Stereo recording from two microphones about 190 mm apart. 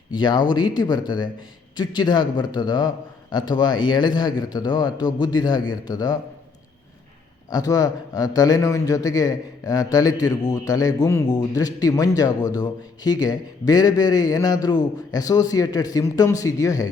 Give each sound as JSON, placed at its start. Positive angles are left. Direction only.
{"t": 0.1, "sound": "a man's voice", "side_deg": 25}
{"t": 7.5, "sound": "a man's voice", "side_deg": 20}